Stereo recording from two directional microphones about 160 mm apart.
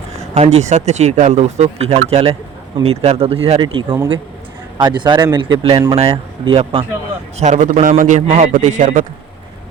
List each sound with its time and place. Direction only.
0.3 s speech: 45° right (ahead or behind); by 6.0 s 20° right (ahead or behind)
6.0 s speech: 35° right (ahead or behind)
7.3 s speech: 50° right (ahead or behind)